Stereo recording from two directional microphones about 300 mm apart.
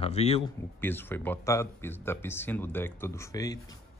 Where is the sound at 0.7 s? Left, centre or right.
Centre.